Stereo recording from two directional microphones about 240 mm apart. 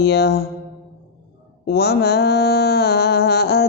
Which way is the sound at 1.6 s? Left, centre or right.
Left.